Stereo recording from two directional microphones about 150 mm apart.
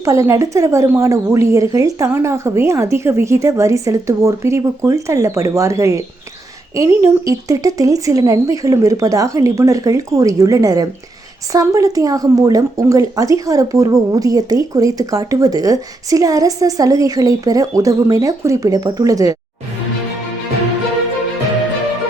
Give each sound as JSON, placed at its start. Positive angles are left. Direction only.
{"t": 0.0, "sound": "a woman's voice", "side_deg": -20}